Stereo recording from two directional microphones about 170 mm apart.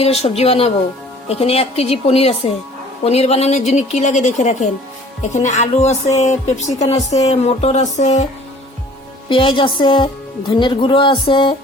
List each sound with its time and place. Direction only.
0.0 s a woman's voice: 35° left (ahead or behind)
9.3 s speech: 30° left (ahead or behind)